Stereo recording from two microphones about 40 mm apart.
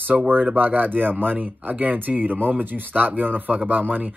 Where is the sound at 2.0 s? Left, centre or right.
Right.